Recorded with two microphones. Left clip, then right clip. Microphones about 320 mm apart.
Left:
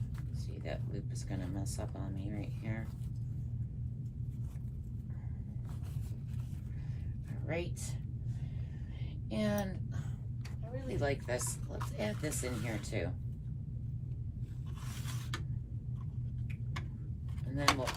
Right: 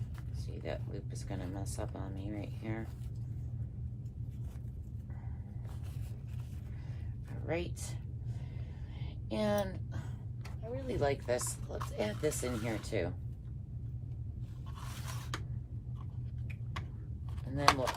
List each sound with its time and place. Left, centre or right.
0.6 s speech: centre
7.4 s speech: centre
9.3 s speech: centre
17.5 s speech: centre